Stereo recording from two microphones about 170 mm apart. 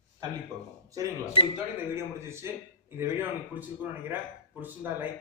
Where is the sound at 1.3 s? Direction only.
30° left (ahead or behind).